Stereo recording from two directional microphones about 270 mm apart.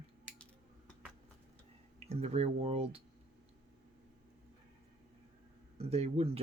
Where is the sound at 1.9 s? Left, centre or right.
Right.